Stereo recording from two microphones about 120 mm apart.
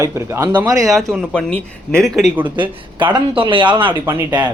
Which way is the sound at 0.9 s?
Centre (ahead or behind).